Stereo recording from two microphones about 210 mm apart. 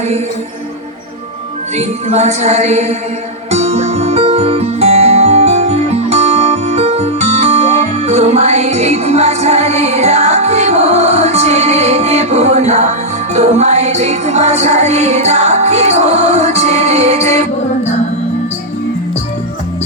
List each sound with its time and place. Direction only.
1.7 s music: 30° right (ahead or behind)